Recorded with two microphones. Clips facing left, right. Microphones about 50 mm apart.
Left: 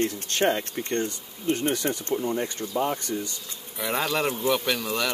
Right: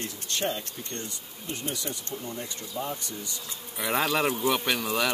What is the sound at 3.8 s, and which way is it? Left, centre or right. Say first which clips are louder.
Speech: even; centre.